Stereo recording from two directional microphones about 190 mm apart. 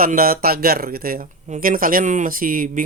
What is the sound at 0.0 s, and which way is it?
Speech, 50° right (ahead or behind).